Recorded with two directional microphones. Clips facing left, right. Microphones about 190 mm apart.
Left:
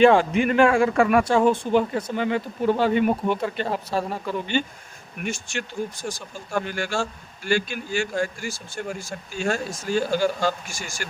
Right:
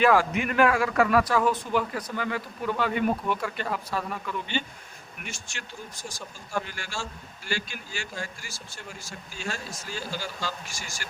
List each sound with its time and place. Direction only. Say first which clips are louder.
0.0 s a man's voice: left 6 dB; 25° left (ahead or behind)
5.2 s a man's voice: left 12 dB; 55° left (ahead or behind)